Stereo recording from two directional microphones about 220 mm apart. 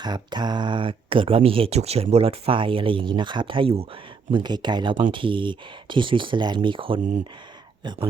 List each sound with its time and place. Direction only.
0.0 s speech: 20° right (ahead or behind)